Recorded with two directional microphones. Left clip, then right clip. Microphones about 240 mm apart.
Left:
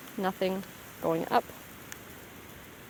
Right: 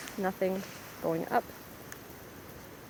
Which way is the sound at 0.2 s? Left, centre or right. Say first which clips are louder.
Left 1 dB; centre.